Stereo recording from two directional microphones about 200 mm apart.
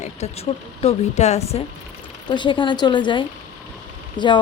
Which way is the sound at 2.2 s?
25° left (ahead or behind).